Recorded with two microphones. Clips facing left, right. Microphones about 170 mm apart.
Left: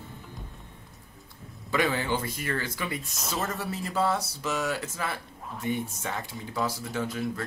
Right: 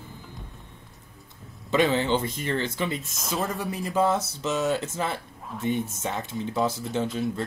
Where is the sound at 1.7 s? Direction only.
25° right (ahead or behind).